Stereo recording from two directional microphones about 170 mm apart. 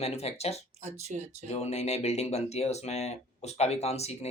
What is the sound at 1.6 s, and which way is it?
Speech, 40° left (ahead or behind).